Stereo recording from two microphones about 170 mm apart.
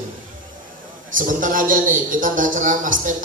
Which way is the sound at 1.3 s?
50° right (ahead or behind).